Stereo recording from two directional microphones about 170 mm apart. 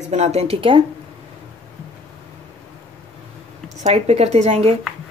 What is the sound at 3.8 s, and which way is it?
Speech, 40° right (ahead or behind).